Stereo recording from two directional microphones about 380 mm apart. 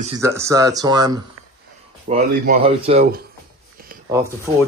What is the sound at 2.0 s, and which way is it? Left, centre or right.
Speech, right.